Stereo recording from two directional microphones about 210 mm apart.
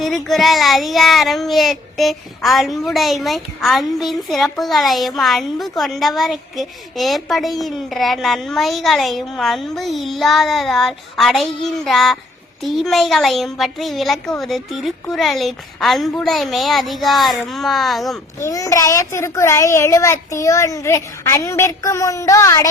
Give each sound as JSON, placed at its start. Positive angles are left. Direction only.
{"t": 0.0, "sound": "speech", "side_deg": 0}
{"t": 18.4, "sound": "a child's voice", "side_deg": 15}